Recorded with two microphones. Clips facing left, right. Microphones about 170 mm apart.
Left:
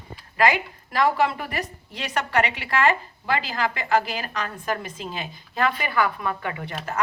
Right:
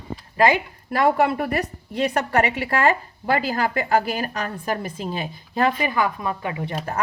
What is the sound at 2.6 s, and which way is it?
A woman's voice, 35° right (ahead or behind).